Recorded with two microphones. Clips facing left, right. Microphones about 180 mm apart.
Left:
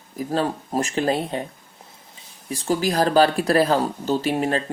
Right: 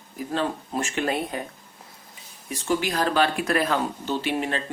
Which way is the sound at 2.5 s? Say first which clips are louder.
Left 3 dB; 35° left (ahead or behind).